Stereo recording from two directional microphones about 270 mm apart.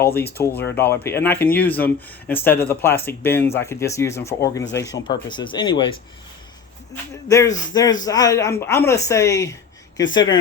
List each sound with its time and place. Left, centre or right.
0.2 s speech: centre